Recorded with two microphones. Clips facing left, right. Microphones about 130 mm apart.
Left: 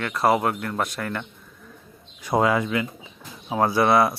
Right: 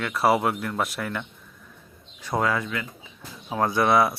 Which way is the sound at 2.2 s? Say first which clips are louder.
Left 4 dB; 15° left (ahead or behind).